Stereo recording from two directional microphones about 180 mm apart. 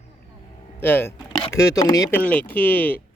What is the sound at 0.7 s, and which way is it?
Speech, 10° left (ahead or behind).